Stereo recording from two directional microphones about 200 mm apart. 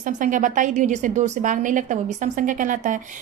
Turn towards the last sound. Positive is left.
turn(degrees=-40)  # may be behind; listen again after turning